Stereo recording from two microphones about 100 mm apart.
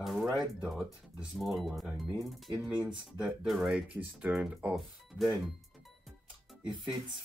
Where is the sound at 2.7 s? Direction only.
15° right (ahead or behind).